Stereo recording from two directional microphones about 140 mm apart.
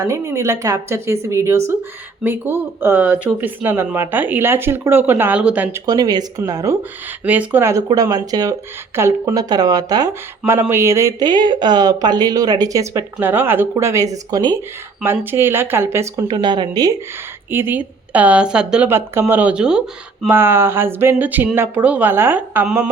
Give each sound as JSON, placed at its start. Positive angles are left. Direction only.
{"t": 0.0, "sound": "speech", "side_deg": -20}
{"t": 5.7, "sound": "speech", "side_deg": -25}
{"t": 7.3, "sound": "speech", "side_deg": -10}
{"t": 11.3, "sound": "speech", "side_deg": -30}
{"t": 15.0, "sound": "speech", "side_deg": -15}
{"t": 16.2, "sound": "speech", "side_deg": -30}
{"t": 17.5, "sound": "speech", "side_deg": -15}
{"t": 18.9, "sound": "speech", "side_deg": -15}